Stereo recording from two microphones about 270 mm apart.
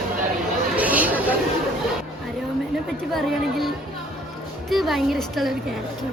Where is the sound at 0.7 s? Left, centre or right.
Centre.